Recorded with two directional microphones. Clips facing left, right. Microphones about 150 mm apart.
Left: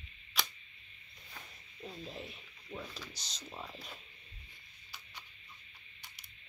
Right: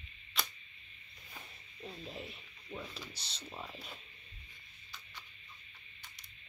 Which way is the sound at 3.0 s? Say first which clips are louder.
Even; 30° right (ahead or behind).